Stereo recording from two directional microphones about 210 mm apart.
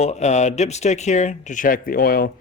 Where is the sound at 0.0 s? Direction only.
30° left (ahead or behind).